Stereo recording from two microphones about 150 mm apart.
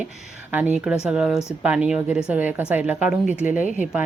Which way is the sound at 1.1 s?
5° right (ahead or behind).